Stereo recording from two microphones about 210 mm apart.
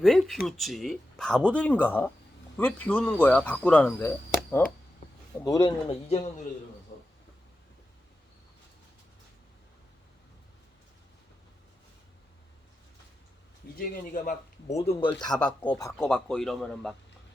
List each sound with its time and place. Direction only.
0.0 s speech: centre (ahead or behind)
5.5 s speech: 20° left (ahead or behind)
13.7 s a man's voice: 40° left (ahead or behind)
14.8 s speech: 20° left (ahead or behind)
16.0 s speech: 5° left (ahead or behind)